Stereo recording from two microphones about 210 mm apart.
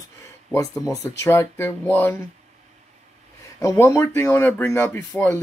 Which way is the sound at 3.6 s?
15° left (ahead or behind).